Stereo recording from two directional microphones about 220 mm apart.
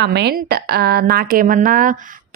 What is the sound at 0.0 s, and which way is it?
A woman's voice, 50° right (ahead or behind).